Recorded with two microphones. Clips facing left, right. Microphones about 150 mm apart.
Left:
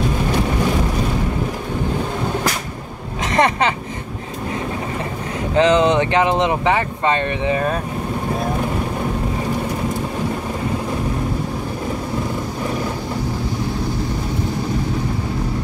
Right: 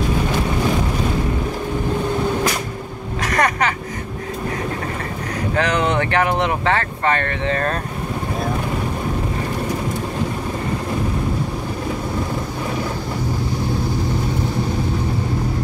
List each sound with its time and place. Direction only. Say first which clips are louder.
3.3 s music: left 2 dB; 25° left (ahead or behind)
5.5 s speech: left 6 dB; 20° left (ahead or behind)